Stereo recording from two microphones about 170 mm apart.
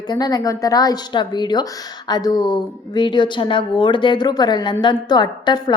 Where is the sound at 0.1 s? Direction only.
25° left (ahead or behind).